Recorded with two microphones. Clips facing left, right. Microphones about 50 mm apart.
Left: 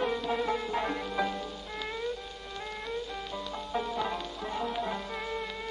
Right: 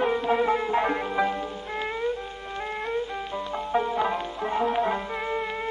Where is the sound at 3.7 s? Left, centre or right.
Right.